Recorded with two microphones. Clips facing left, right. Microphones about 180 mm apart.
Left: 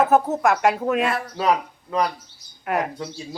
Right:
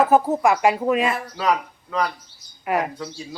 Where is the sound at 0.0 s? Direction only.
Centre (ahead or behind).